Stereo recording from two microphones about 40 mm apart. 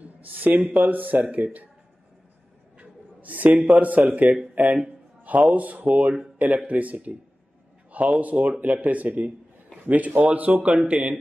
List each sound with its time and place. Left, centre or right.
0.0 s speech: right
2.8 s a sound: right
3.6 s a man's voice: right
5.5 s a man's voice: right